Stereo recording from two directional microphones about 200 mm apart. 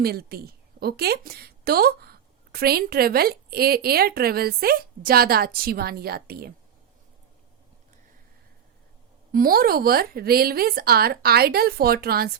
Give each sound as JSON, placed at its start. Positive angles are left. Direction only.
{"t": 0.0, "sound": "a woman's voice", "side_deg": -50}
{"t": 9.3, "sound": "a woman's voice", "side_deg": -45}